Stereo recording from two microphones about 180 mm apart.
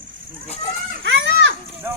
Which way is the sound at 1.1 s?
80° right.